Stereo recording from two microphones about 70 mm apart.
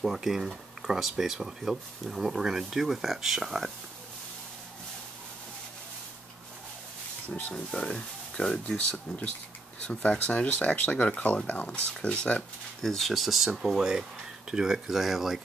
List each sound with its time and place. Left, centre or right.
0.0 s speech: centre
7.2 s speech: left
7.5 s speech: centre
12.8 s speech: centre